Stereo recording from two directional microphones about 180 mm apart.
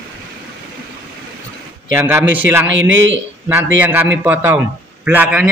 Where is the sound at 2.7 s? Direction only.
90° right.